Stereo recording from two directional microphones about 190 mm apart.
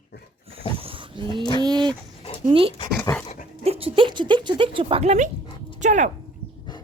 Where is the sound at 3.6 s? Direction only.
30° right (ahead or behind).